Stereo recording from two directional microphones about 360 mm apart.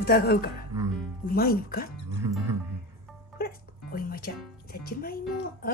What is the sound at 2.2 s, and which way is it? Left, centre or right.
Music, centre.